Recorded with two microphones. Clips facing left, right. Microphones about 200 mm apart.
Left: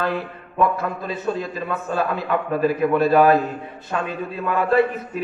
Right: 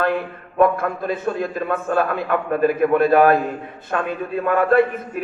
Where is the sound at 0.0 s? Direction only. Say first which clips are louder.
Right 3 dB; 50° right (ahead or behind).